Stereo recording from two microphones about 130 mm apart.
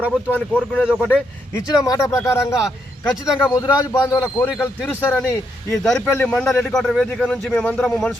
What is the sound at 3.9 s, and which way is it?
Speech, 25° left (ahead or behind).